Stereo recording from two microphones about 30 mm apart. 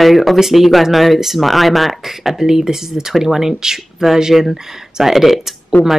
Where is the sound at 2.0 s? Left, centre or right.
Centre.